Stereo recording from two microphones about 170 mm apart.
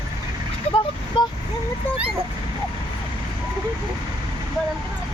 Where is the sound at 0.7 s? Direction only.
40° left (ahead or behind).